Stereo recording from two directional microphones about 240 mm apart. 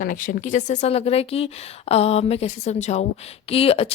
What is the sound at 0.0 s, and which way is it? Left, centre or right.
A woman's voice, left.